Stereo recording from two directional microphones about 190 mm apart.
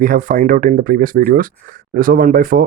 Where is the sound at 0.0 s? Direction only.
45° right (ahead or behind).